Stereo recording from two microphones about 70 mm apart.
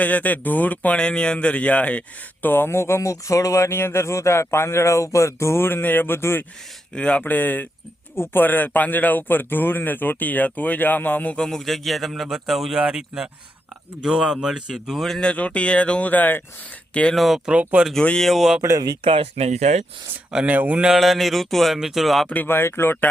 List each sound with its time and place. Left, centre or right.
0.0 s speech: left
2.5 s speech: left
6.9 s speech: centre
11.3 s speech: centre
15.3 s speech: centre
17.2 s speech: centre
17.5 s speech: centre
18.2 s speech: centre
20.3 s speech: centre
20.9 s speech: centre
22.4 s speech: left